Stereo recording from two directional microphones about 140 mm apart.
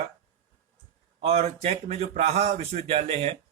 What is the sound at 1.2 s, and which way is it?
Speech, 45° right (ahead or behind).